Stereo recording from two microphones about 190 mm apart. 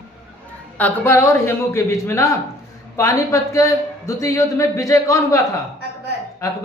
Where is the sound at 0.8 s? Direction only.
10° left (ahead or behind).